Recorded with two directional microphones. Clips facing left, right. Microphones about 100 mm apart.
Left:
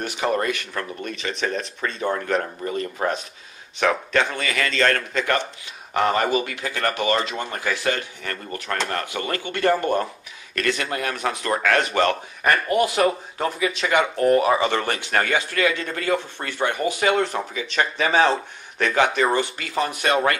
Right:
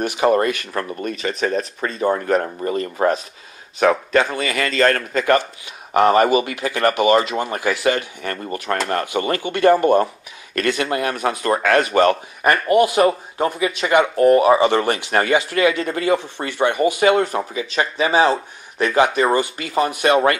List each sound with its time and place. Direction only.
0.0 s speech: 5° right (ahead or behind)